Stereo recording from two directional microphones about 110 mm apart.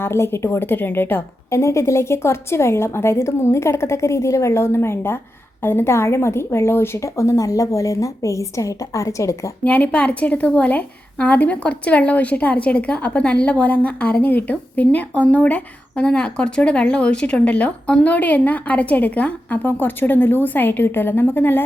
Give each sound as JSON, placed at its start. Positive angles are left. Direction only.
{"t": 0.0, "sound": "a woman's voice", "side_deg": 20}
{"t": 9.6, "sound": "a woman's voice", "side_deg": 15}